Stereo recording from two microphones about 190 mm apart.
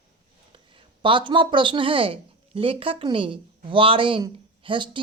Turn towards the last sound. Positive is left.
turn(degrees=-25)  # may be behind; listen again after turning